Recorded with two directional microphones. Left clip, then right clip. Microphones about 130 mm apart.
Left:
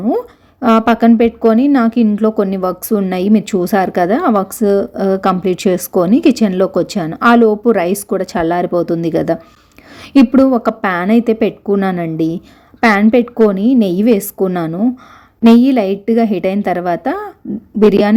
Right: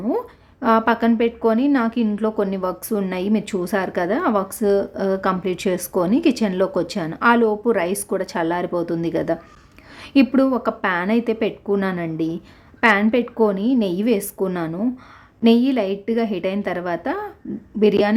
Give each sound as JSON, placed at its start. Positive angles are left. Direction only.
{"t": 0.0, "sound": "a woman's voice", "side_deg": 30}